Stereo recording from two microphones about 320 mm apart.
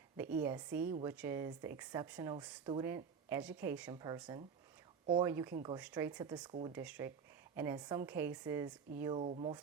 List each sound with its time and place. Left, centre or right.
0.3 s speech: centre